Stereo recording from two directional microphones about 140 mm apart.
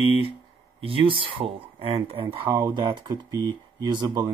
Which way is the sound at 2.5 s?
25° right (ahead or behind).